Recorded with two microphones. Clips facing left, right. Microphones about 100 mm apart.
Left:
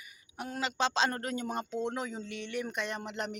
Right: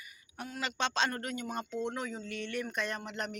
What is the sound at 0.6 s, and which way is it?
A man's voice, 25° left (ahead or behind).